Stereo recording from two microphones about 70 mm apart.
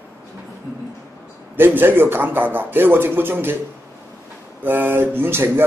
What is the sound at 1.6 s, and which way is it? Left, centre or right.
Speech, right.